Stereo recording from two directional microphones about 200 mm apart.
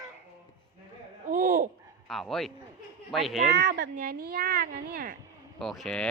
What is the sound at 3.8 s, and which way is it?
Speech, 45° right (ahead or behind).